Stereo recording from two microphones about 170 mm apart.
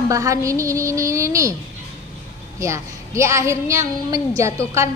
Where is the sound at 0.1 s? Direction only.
20° right (ahead or behind).